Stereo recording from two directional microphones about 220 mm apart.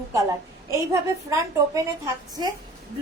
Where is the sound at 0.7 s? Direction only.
15° right (ahead or behind).